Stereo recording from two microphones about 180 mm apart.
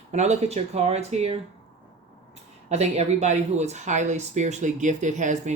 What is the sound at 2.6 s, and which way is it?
Speech, 40° right (ahead or behind).